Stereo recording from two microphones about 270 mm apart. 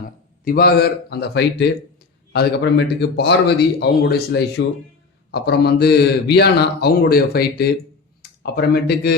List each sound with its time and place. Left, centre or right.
0.4 s speech: left